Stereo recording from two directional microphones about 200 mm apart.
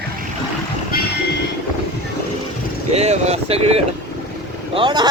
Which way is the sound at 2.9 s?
30° right (ahead or behind).